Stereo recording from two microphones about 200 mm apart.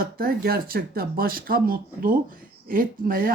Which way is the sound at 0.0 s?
50° right (ahead or behind).